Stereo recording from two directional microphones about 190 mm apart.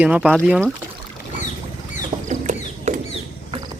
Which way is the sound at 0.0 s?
5° right (ahead or behind).